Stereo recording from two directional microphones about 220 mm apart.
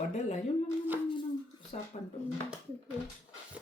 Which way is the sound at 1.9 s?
25° left (ahead or behind).